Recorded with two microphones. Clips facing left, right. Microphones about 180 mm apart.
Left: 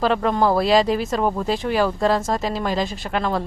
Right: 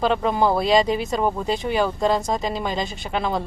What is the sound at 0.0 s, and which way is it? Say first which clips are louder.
Speech: left 1 dB; centre (ahead or behind).